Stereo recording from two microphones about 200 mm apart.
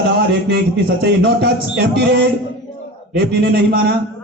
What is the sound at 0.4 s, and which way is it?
A man's voice, 55° right (ahead or behind).